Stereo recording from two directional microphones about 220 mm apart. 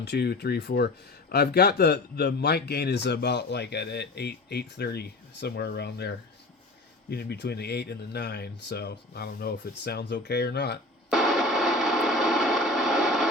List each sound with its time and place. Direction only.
0.0 s a man's voice: 50° left (ahead or behind)
11.1 s music: centre (ahead or behind)